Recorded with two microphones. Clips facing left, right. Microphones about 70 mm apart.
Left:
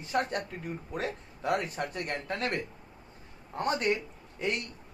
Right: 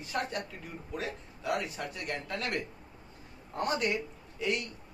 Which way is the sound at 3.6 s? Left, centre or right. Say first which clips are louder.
Left 2 dB; left.